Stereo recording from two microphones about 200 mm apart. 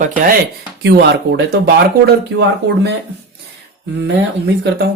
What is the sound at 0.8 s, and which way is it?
Speech, 55° right (ahead or behind).